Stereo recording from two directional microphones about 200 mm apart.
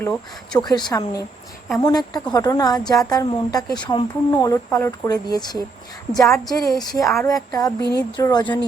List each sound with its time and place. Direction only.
0.0 s speech: 10° left (ahead or behind)
0.6 s a woman's voice: 20° left (ahead or behind)
7.8 s speech: 55° left (ahead or behind)
8.1 s a woman's voice: 20° left (ahead or behind)